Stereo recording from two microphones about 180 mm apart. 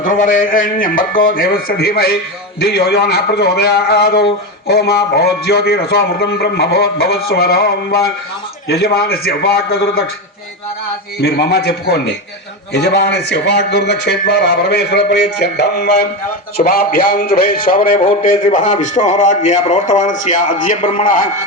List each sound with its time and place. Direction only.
0.0 s a man's voice: 45° left (ahead or behind)
11.2 s a man's voice: 60° left (ahead or behind)